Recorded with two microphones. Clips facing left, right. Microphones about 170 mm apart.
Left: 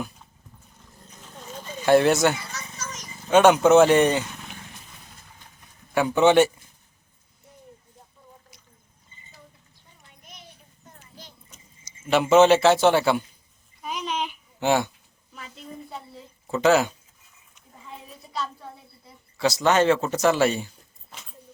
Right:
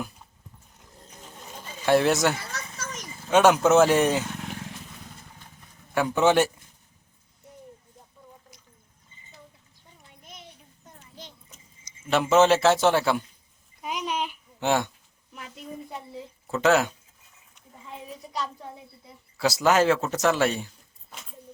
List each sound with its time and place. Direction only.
1.8 s a man's voice: centre (ahead or behind)
2.4 s a sound: 60° right (ahead or behind)
3.2 s a man's voice: centre (ahead or behind)
5.9 s a man's voice: centre (ahead or behind)
10.8 s children playing: 20° right (ahead or behind)
12.0 s a man's voice: centre (ahead or behind)
13.8 s babbling: 15° right (ahead or behind)
15.5 s a sound: 10° right (ahead or behind)
16.5 s a man's voice: centre (ahead or behind)
18.1 s a sound: 15° right (ahead or behind)
19.4 s speech: 5° right (ahead or behind)